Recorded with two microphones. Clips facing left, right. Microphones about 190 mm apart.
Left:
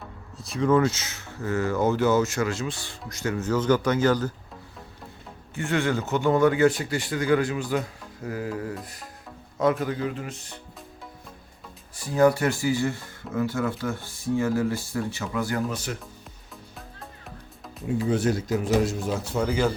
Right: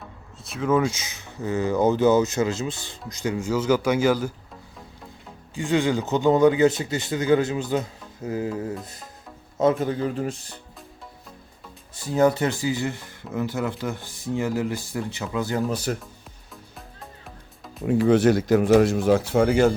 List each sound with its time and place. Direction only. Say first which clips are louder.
0.4 s speech: left 1 dB; 5° right (ahead or behind)
5.5 s speech: right 3 dB; 15° right (ahead or behind); by 10.3 s 35° right (ahead or behind)
12.1 s speech: even; 20° right (ahead or behind)
15.7 s speech: right 5 dB; 35° right (ahead or behind)
17.8 s speech: right 6 dB; 65° right (ahead or behind)